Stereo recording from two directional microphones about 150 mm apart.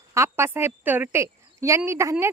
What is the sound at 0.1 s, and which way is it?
A woman's voice, 15° right (ahead or behind).